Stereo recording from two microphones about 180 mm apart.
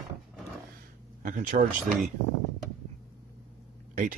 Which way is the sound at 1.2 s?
45° right (ahead or behind).